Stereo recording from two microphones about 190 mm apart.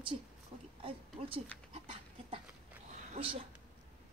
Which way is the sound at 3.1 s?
30° right (ahead or behind).